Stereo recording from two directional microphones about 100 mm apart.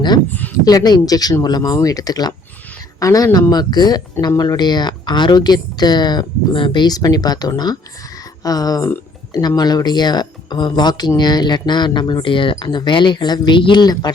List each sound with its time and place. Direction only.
0.3 s speech: 20° left (ahead or behind)
0.6 s speech: 40° left (ahead or behind)